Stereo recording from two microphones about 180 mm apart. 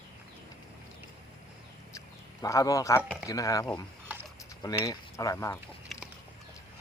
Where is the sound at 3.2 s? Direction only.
20° left (ahead or behind).